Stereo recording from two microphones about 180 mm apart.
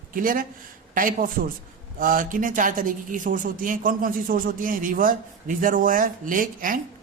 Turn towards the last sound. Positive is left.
turn(degrees=-50)  # may be behind; listen again after turning